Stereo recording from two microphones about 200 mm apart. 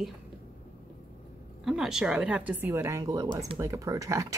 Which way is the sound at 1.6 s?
Centre (ahead or behind).